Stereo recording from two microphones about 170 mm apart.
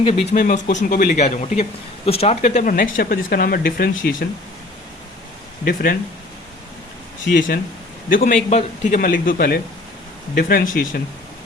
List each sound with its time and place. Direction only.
0.0 s speech: 35° left (ahead or behind)
0.3 s speech: 50° left (ahead or behind)
5.6 s speech: 60° left (ahead or behind)
7.3 s speech: 55° left (ahead or behind)
8.4 s speech: 45° left (ahead or behind)